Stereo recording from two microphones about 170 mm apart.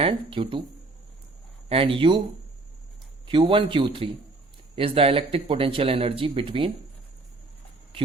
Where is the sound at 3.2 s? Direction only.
30° right (ahead or behind).